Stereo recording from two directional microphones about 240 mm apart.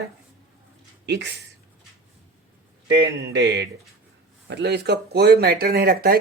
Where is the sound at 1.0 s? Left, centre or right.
Right.